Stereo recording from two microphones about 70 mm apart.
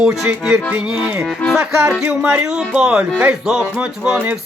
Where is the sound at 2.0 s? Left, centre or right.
Centre.